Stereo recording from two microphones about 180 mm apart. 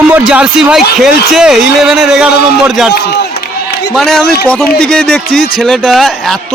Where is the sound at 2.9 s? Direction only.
65° left (ahead or behind).